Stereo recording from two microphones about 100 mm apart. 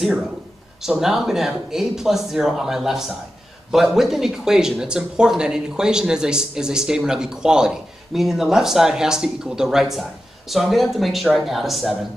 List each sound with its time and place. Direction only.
0.8 s speech: 5° right (ahead or behind)